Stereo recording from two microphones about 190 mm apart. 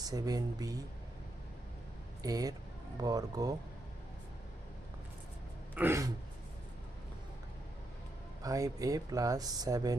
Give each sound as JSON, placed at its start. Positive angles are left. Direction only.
{"t": 0.0, "sound": "speech", "side_deg": -20}
{"t": 2.2, "sound": "speech", "side_deg": -20}
{"t": 5.7, "sound": "a sound", "side_deg": -10}
{"t": 8.4, "sound": "speech", "side_deg": -20}